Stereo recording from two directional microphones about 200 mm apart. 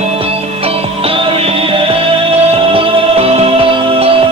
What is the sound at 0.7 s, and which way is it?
Music, 30° right (ahead or behind).